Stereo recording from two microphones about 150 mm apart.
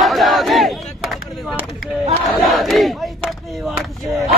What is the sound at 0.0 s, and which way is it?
Battle cry, centre (ahead or behind).